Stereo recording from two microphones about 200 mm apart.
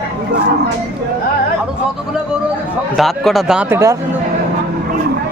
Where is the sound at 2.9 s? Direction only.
Centre (ahead or behind).